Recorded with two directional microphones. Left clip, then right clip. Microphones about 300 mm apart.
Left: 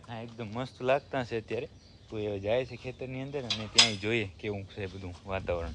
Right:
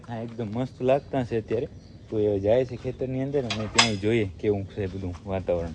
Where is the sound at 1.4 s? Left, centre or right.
Left.